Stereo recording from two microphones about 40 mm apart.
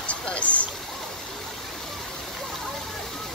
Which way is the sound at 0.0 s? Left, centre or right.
Left.